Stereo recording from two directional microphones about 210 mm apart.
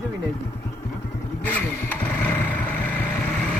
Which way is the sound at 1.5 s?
5° left (ahead or behind).